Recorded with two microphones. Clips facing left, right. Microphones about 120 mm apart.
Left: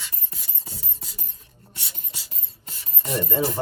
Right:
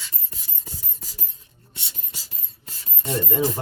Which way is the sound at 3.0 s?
25° right (ahead or behind).